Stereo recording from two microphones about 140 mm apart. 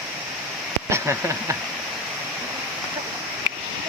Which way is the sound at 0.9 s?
20° right (ahead or behind).